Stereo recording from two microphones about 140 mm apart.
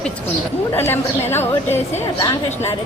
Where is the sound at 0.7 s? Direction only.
15° left (ahead or behind).